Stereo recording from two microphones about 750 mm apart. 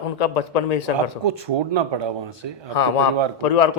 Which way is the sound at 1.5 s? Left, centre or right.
Right.